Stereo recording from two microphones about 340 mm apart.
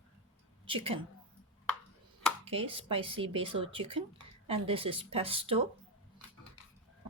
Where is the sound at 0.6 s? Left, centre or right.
Centre.